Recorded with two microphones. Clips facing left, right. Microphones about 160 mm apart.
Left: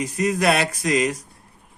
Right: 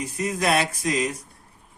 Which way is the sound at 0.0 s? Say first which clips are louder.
Left 5 dB; 70° left (ahead or behind).